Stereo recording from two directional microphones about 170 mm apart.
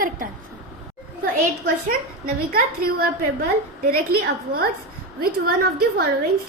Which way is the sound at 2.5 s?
55° right (ahead or behind).